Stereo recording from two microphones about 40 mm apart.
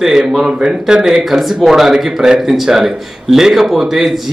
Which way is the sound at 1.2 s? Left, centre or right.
Centre.